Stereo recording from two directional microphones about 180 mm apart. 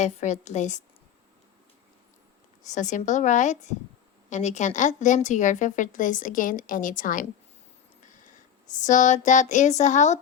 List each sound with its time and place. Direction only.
0.0 s a woman's voice: 40° left (ahead or behind)
2.6 s a woman's voice: 40° left (ahead or behind)
8.8 s a woman's voice: 45° left (ahead or behind)